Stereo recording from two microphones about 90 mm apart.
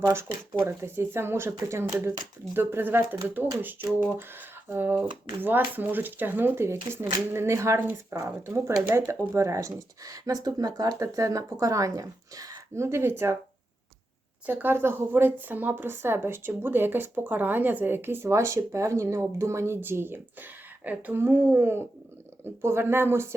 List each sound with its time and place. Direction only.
0.0 s a woman's voice: 30° right (ahead or behind)
9.3 s speech: 35° right (ahead or behind)
14.4 s a woman's voice: 25° right (ahead or behind)